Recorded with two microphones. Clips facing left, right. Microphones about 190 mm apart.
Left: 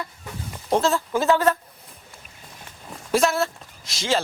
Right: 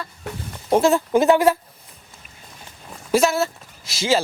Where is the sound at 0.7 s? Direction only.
15° right (ahead or behind).